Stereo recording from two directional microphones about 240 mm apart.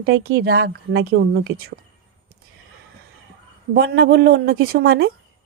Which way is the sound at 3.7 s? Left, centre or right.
Right.